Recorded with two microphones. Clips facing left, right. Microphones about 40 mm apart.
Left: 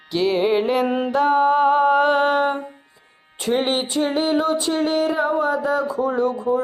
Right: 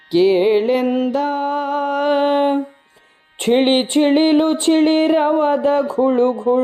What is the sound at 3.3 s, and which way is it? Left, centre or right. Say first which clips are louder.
Music: right 6 dB; right.